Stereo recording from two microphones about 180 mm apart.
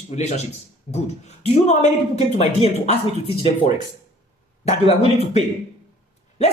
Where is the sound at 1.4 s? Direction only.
40° left (ahead or behind).